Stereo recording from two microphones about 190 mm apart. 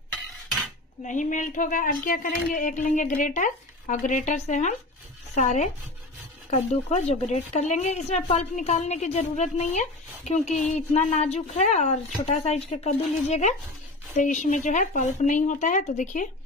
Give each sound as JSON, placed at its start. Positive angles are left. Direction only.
{"t": 1.0, "sound": "a woman's voice", "side_deg": 40}